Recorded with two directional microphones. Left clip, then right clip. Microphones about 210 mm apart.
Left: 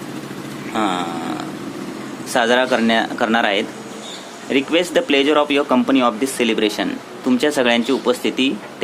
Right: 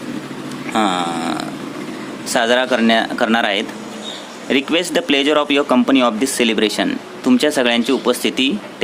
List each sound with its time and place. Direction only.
0.7 s purr: 15° right (ahead or behind)
2.3 s a man's voice: 10° right (ahead or behind)